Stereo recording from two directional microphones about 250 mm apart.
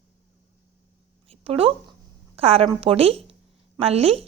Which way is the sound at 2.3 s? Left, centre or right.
Right.